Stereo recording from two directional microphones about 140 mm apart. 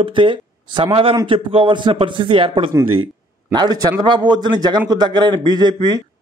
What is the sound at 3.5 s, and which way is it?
A man's voice, 30° right (ahead or behind).